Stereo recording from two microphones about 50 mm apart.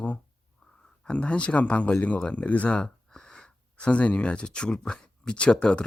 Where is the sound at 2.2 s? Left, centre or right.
Left.